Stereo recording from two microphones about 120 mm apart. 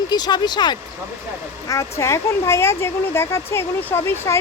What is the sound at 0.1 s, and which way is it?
Speech, 35° left (ahead or behind).